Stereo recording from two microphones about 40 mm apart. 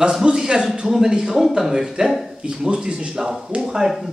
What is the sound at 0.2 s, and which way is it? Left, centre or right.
Speech, right.